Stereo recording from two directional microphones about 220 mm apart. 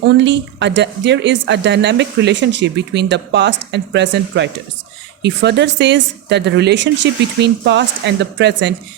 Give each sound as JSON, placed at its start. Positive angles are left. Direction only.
{"t": 0.2, "sound": "a woman's voice", "side_deg": -55}